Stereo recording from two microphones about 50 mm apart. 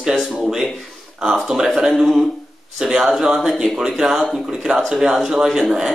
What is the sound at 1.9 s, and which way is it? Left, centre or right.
Speech, centre.